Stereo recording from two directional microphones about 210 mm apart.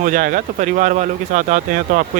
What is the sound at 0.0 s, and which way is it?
Speech, 40° right (ahead or behind).